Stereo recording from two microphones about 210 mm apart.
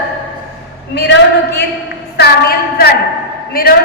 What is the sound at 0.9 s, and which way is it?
A man's voice, 55° left (ahead or behind).